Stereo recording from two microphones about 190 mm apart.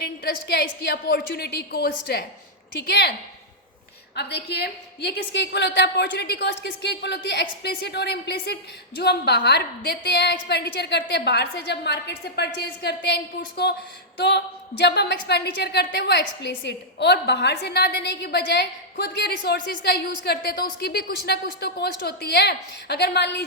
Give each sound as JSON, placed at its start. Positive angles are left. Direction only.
{"t": 0.0, "sound": "a woman's voice", "side_deg": 60}
{"t": 4.1, "sound": "a woman's voice", "side_deg": 60}